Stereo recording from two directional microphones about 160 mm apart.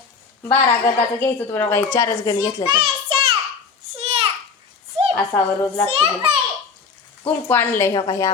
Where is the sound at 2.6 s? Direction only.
30° right (ahead or behind).